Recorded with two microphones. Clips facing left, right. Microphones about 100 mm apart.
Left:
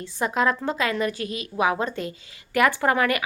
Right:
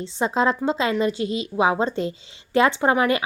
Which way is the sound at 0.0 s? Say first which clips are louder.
Right 2 dB; 25° right (ahead or behind).